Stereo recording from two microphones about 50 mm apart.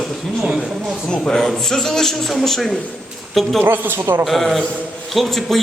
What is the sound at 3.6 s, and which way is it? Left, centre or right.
Speech, right.